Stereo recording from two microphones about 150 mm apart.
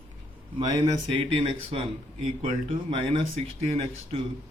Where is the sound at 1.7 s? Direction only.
40° right (ahead or behind).